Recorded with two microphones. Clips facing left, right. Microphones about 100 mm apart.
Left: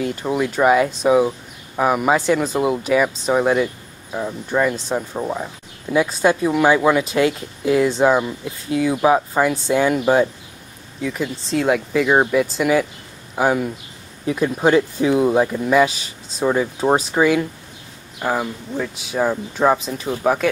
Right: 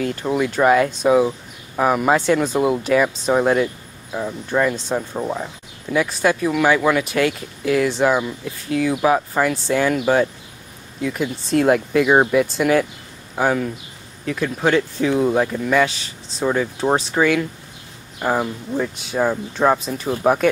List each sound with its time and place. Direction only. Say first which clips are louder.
0.0 s speech: even; 10° left (ahead or behind)
5.9 s speech: left 2 dB; 20° left (ahead or behind)
11.0 s speech: right 1 dB; 5° right (ahead or behind); by 17.5 s 15° left (ahead or behind)
18.2 s speech: right 1 dB; 5° right (ahead or behind)